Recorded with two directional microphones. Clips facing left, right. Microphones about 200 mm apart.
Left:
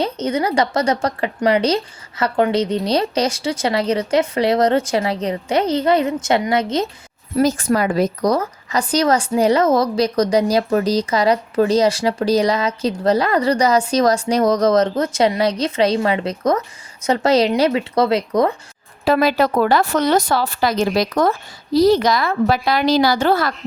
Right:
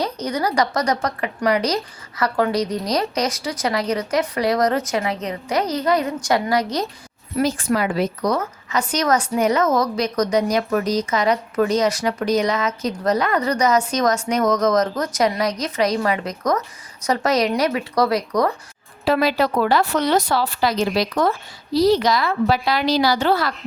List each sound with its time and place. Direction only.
0.0 s a woman's voice: 25° left (ahead or behind)
7.3 s a woman's voice: 40° left (ahead or behind); by 18.5 s 25° left (ahead or behind)
19.0 s a woman's voice: 50° left (ahead or behind)